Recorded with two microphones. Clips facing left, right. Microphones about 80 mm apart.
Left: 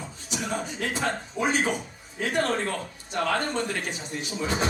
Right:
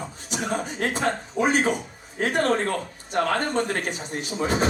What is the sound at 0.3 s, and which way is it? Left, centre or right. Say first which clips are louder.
A man's voice: right 3 dB; right.